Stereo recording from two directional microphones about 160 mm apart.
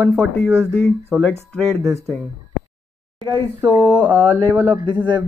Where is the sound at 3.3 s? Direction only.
15° right (ahead or behind).